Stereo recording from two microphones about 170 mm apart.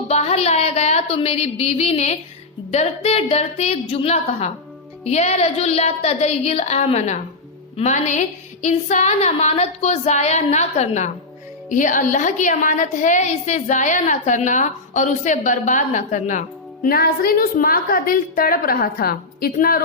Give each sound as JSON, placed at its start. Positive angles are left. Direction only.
{"t": 0.1, "sound": "a woman's voice", "side_deg": 40}
{"t": 16.8, "sound": "a woman's voice", "side_deg": 60}